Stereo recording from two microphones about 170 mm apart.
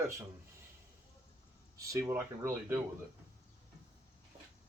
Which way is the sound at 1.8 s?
20° right (ahead or behind).